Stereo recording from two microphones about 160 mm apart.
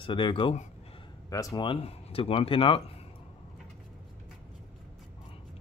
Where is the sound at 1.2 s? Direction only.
20° left (ahead or behind).